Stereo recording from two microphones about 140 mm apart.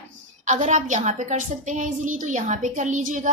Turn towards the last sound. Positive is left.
turn(degrees=-65)  # may be behind; listen again after turning